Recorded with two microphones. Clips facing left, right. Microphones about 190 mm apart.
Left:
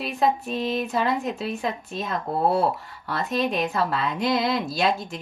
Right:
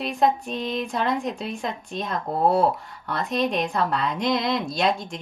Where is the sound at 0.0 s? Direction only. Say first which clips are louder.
Right 1 dB; centre (ahead or behind).